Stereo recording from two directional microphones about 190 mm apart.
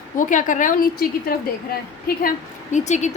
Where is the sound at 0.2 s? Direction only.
45° left (ahead or behind).